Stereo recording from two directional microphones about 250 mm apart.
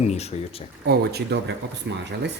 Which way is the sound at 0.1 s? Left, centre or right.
Left.